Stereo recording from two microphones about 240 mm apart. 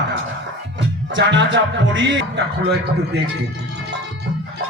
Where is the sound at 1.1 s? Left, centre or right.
Right.